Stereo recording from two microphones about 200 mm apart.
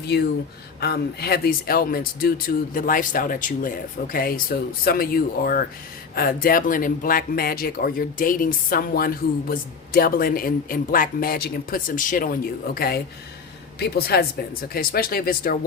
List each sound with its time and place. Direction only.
0.8 s speech: 55° left (ahead or behind)